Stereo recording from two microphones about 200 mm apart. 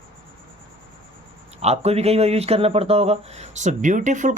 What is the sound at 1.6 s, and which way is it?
Speech, 30° right (ahead or behind).